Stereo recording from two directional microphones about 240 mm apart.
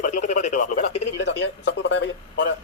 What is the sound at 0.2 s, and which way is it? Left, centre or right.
Speech, left.